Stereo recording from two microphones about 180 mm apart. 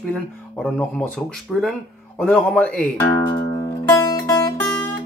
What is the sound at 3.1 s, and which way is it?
Music, 15° left (ahead or behind).